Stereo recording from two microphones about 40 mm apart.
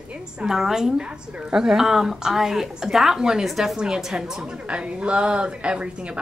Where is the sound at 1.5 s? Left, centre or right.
Centre.